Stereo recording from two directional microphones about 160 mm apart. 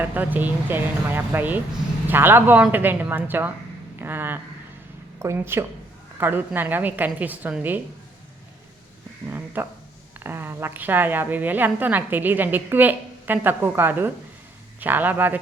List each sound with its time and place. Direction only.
0.0 s a woman's voice: 10° right (ahead or behind)
9.3 s a woman's voice: 10° right (ahead or behind)